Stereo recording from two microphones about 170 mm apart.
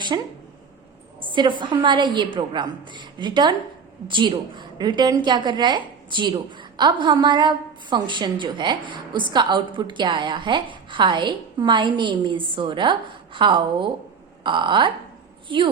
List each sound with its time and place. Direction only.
0.1 s a woman's voice: 25° right (ahead or behind)